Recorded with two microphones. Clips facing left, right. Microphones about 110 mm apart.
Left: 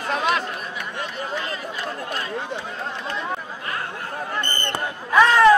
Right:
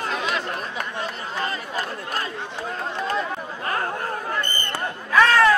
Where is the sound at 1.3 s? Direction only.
40° right (ahead or behind).